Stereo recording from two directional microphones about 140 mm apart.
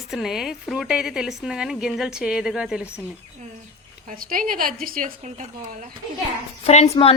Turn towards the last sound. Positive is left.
turn(degrees=50)  # may be behind; listen again after turning